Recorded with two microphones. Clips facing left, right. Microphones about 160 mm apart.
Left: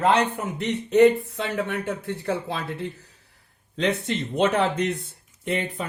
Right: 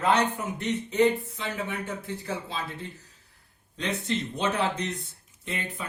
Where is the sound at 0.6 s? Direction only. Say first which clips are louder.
Left 7 dB; 75° left (ahead or behind).